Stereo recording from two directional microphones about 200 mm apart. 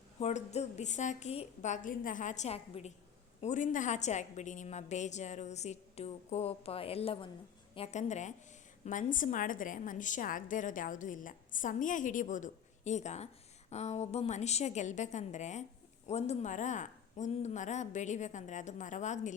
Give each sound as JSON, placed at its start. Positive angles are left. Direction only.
{"t": 0.2, "sound": "a woman's voice", "side_deg": 35}